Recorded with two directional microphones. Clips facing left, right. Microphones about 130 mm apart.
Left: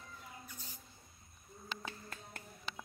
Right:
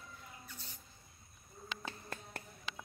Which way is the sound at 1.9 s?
30° right (ahead or behind).